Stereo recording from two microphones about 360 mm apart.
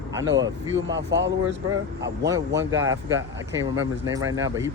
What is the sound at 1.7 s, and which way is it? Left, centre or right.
Speech, centre.